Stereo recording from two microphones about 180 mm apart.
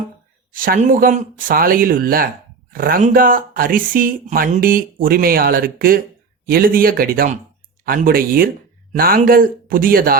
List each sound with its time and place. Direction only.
0.5 s speech: 50° right (ahead or behind)